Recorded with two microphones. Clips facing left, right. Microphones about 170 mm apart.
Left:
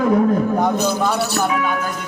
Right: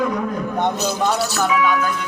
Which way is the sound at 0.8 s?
55° left (ahead or behind).